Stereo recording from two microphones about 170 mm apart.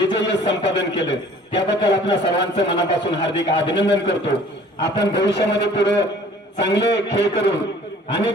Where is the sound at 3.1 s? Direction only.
90° left.